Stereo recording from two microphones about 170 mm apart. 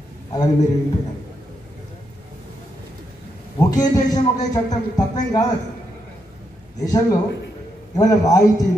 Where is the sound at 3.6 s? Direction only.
20° left (ahead or behind).